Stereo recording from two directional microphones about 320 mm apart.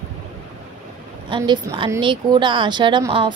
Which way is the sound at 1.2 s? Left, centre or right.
Centre.